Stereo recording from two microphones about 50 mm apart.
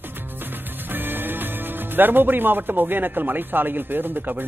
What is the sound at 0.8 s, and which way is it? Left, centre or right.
Speech, right.